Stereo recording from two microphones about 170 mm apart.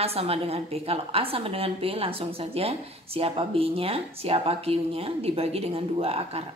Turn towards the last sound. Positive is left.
turn(degrees=-35)  # may be behind; listen again after turning